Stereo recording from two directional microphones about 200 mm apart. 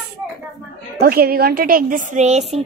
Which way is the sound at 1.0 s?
50° right (ahead or behind).